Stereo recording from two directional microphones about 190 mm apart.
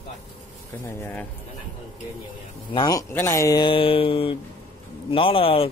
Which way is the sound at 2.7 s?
20° left (ahead or behind).